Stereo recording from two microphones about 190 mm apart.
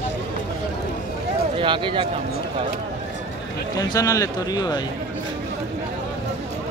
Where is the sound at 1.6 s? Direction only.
25° right (ahead or behind).